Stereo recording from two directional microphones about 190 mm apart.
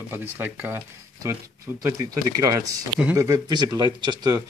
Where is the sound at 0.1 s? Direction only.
10° right (ahead or behind).